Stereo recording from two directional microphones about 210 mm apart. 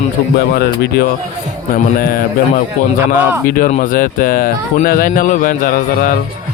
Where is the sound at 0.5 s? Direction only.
50° left (ahead or behind).